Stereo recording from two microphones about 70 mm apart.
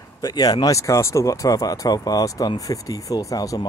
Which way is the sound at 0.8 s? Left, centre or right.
Left.